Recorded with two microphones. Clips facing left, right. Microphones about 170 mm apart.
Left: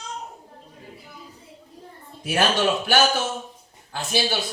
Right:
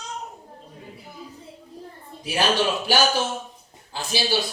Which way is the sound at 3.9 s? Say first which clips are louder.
Even; 50° left (ahead or behind).